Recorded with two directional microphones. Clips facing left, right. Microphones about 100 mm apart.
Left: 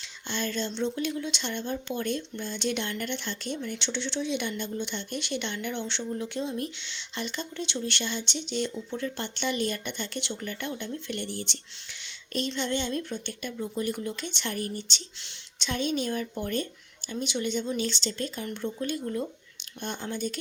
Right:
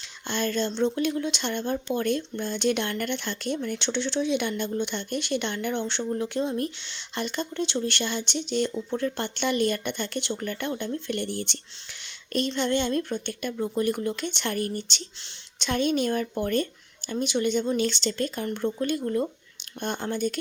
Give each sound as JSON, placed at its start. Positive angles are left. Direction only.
{"t": 0.3, "sound": "a woman's voice", "side_deg": -50}